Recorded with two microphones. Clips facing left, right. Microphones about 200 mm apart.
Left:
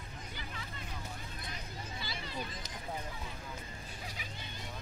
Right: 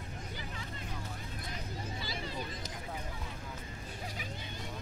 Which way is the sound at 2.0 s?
40° right (ahead or behind).